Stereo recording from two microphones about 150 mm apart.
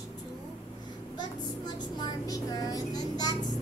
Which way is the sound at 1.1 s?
30° left (ahead or behind).